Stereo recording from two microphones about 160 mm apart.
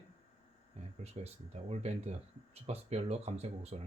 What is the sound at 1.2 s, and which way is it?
Speech, 40° right (ahead or behind).